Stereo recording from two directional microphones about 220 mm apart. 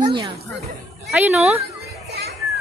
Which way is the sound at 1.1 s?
5° right (ahead or behind).